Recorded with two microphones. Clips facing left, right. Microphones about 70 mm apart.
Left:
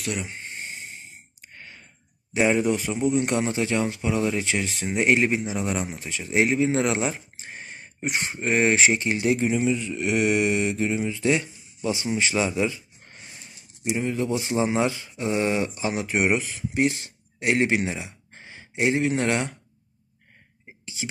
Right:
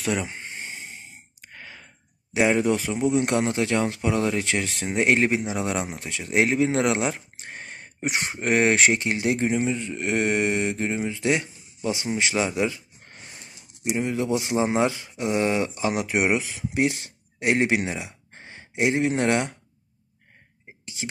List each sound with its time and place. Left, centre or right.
1.4 s a sound: right
2.5 s a man's voice: right
4.9 s a man's voice: right
9.2 s mantra: right
13.8 s a man's voice: right
14.6 s a man's voice: right
20.8 s a sound: right